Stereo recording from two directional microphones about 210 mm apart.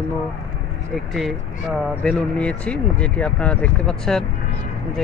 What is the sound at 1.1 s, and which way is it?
Speech, centre (ahead or behind).